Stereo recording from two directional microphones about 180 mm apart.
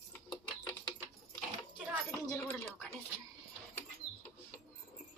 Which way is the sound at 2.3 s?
10° left (ahead or behind).